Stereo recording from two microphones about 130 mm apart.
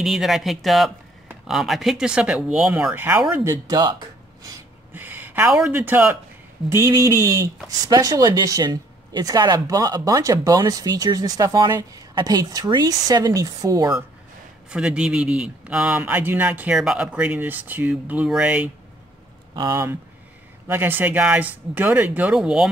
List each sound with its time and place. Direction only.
0.0 s a man's voice: centre (ahead or behind)
3.3 s speech: 25° right (ahead or behind)
4.9 s speech: 15° right (ahead or behind)
6.7 s speech: 25° right (ahead or behind)
14.7 s a man's voice: 5° right (ahead or behind)
19.5 s a man's voice: 25° right (ahead or behind); by 22.7 s 5° right (ahead or behind)